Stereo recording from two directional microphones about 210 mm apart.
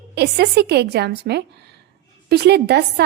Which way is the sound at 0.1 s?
50° right (ahead or behind).